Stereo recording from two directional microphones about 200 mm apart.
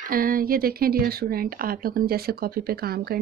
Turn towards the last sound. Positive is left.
turn(degrees=-50)  # may be behind; listen again after turning